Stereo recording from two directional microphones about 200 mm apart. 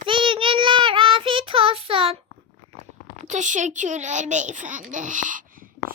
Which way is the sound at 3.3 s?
40° right (ahead or behind).